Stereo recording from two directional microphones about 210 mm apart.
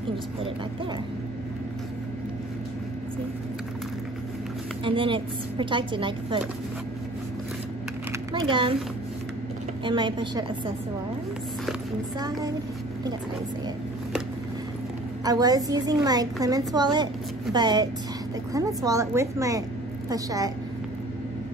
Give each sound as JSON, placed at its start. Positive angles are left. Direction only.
{"t": 4.8, "sound": "a woman's voice", "side_deg": -25}
{"t": 8.3, "sound": "a woman's voice", "side_deg": -25}
{"t": 9.8, "sound": "a woman's voice", "side_deg": -20}
{"t": 12.2, "sound": "a woman's voice", "side_deg": -15}
{"t": 15.2, "sound": "a woman's voice", "side_deg": -20}